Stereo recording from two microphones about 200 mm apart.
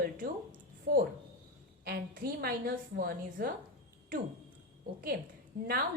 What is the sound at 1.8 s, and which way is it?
A woman's voice, 50° right (ahead or behind).